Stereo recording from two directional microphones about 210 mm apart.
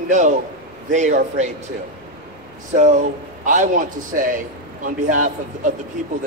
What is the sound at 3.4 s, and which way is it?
A man's voice, 35° right (ahead or behind).